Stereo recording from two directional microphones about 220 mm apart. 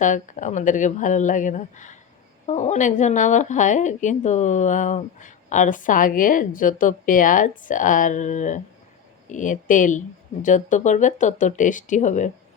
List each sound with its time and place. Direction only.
0.0 s speech: 35° left (ahead or behind)